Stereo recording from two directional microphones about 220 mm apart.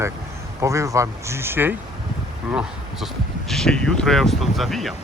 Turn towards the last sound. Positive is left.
turn(degrees=0)  # may be behind; listen again after turning